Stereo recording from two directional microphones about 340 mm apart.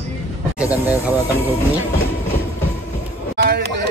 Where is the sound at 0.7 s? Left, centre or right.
Centre.